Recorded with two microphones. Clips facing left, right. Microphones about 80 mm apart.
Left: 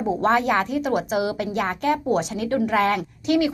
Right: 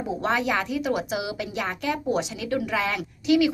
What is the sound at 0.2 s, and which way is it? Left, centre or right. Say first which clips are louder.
A woman's voice: left 4 dB; left.